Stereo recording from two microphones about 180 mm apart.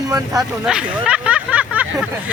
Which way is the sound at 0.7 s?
5° right (ahead or behind).